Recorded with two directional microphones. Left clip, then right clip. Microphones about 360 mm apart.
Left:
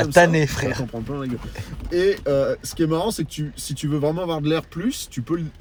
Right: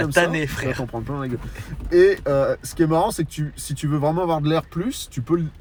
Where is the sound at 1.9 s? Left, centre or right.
Centre.